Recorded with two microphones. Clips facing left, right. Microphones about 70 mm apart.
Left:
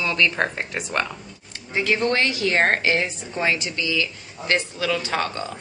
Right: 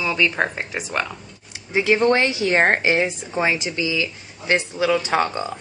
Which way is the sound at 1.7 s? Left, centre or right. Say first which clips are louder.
Right 4 dB; right.